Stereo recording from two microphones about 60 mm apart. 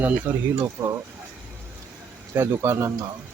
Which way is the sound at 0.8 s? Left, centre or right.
Right.